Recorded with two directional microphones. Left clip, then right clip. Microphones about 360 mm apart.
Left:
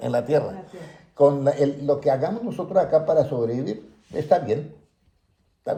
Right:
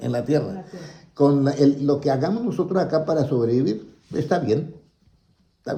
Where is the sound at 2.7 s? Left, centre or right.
Right.